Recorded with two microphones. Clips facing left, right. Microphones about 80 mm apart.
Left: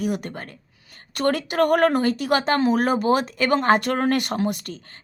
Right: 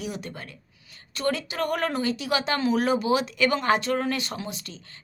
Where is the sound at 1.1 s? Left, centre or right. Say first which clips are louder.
Left 7 dB; left.